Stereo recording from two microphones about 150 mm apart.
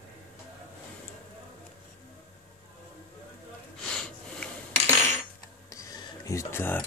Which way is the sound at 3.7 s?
5° left (ahead or behind).